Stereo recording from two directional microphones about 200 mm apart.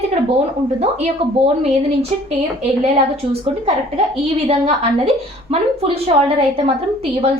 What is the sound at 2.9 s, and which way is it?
A woman's voice, 30° right (ahead or behind).